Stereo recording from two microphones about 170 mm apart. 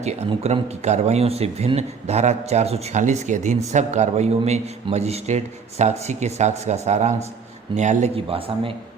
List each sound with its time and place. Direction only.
0.0 s speech: 40° right (ahead or behind)